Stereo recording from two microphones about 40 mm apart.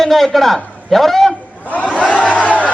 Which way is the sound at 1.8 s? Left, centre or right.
Left.